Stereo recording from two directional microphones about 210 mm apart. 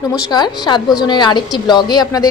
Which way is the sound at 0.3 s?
20° left (ahead or behind).